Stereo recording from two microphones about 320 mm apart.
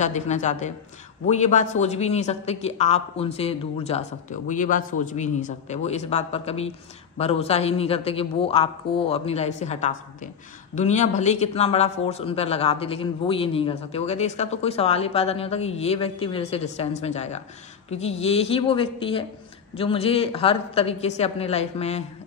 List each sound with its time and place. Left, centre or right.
0.0 s a woman's voice: left